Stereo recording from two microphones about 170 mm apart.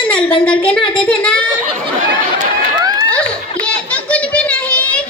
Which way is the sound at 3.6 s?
10° left (ahead or behind).